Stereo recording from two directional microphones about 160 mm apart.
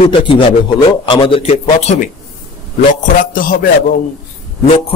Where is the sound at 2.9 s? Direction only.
60° left (ahead or behind).